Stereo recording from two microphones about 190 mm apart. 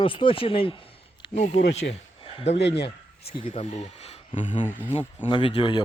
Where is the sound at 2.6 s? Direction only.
65° left (ahead or behind).